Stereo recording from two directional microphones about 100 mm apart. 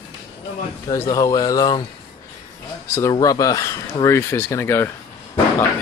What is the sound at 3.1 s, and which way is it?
Speech, 40° left (ahead or behind).